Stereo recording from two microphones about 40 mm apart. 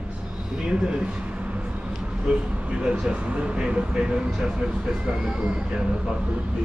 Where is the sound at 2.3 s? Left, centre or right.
Right.